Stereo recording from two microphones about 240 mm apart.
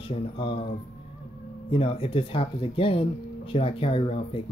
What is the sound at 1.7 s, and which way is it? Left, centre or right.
Speech, left.